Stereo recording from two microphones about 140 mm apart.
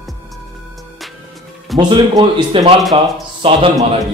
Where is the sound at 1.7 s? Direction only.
35° right (ahead or behind).